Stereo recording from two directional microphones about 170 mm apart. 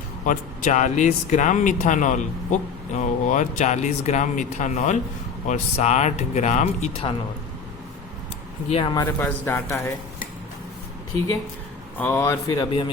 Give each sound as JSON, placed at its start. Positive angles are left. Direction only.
{"t": 0.3, "sound": "speech", "side_deg": 50}
{"t": 8.7, "sound": "speech", "side_deg": 25}
{"t": 9.2, "sound": "speech", "side_deg": 15}
{"t": 11.9, "sound": "speech", "side_deg": 15}